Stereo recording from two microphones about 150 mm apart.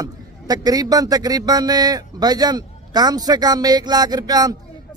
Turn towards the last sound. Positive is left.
turn(degrees=-25)  # may be behind; listen again after turning